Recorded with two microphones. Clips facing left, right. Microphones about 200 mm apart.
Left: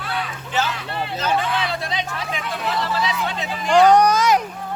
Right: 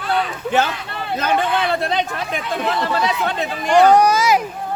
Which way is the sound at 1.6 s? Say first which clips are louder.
Right 6 dB; 55° right (ahead or behind).